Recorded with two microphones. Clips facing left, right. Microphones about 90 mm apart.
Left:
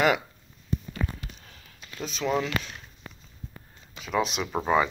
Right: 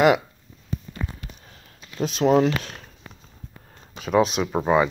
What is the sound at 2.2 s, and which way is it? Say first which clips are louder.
Speech: right 9 dB; 35° right (ahead or behind).